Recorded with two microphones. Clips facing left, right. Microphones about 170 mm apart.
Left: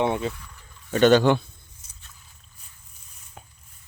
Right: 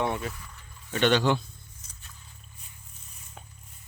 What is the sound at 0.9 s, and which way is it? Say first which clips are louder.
Speech: left 6 dB; 45° left (ahead or behind).